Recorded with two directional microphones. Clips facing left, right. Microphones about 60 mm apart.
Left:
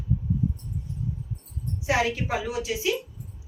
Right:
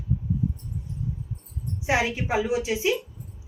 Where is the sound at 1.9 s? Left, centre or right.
Right.